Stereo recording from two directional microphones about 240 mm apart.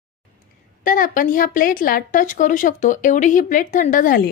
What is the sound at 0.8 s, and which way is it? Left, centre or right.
Speech, left.